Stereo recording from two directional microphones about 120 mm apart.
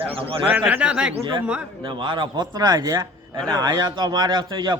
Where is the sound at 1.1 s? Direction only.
45° right (ahead or behind).